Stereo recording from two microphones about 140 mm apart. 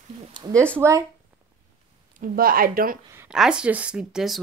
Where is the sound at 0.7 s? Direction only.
20° right (ahead or behind).